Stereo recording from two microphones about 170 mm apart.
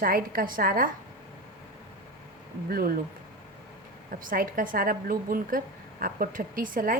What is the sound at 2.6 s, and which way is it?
Speech, 60° right (ahead or behind).